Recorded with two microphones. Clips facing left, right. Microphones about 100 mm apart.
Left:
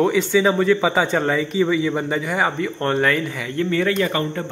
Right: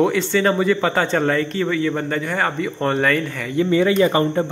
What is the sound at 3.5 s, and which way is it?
Speech, 15° right (ahead or behind).